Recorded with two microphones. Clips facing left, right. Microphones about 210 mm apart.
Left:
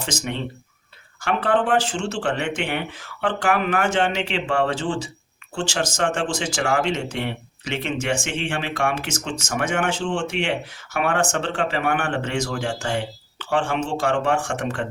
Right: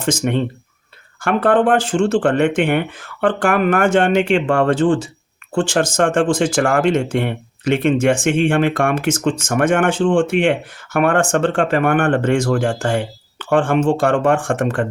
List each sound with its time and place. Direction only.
0.0 s speech: 50° right (ahead or behind)